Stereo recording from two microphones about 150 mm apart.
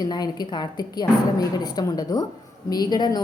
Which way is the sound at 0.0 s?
30° left (ahead or behind).